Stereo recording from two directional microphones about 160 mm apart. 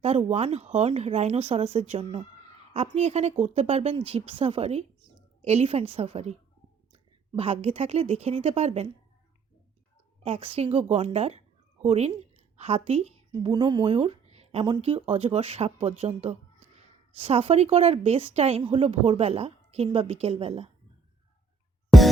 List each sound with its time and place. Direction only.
0.3 s a woman's voice: 40° right (ahead or behind)
7.3 s speech: 40° right (ahead or behind)
10.2 s a woman's voice: 35° right (ahead or behind)
13.5 s speech: 30° right (ahead or behind)
21.9 s music: centre (ahead or behind)